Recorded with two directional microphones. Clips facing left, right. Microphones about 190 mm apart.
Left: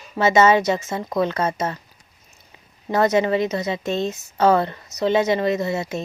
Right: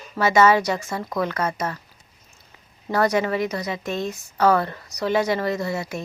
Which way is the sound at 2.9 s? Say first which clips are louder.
Left 3 dB; 20° left (ahead or behind).